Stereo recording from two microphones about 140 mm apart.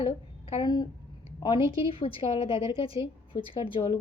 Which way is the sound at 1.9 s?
40° left (ahead or behind).